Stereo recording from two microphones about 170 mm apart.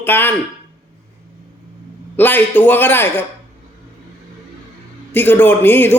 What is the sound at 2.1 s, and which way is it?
A man's voice, 10° left (ahead or behind).